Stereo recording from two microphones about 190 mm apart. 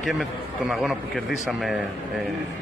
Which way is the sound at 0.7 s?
Centre (ahead or behind).